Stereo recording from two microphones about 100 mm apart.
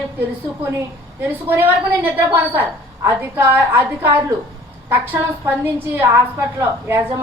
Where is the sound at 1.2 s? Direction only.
20° right (ahead or behind).